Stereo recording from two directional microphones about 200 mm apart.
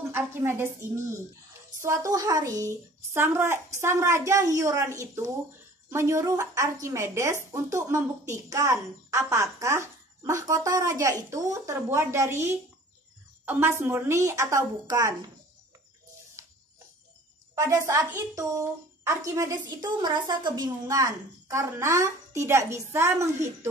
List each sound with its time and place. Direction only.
0.1 s speech: 10° right (ahead or behind)
17.6 s speech: 15° right (ahead or behind)